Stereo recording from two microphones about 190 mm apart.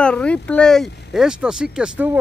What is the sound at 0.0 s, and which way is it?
Speech, 5° left (ahead or behind).